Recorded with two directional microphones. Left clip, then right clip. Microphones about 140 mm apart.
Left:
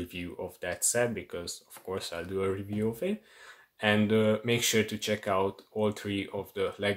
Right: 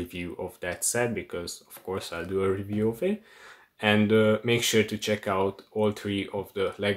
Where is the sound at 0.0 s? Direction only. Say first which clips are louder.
Right 3 dB; 5° left (ahead or behind).